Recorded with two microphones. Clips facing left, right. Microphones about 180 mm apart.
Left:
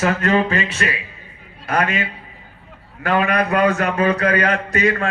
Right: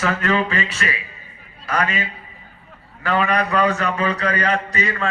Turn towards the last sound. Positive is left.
turn(degrees=50)  # may be behind; listen again after turning